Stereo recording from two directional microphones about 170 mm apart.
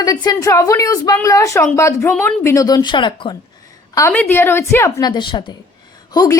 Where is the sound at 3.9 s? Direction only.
10° left (ahead or behind).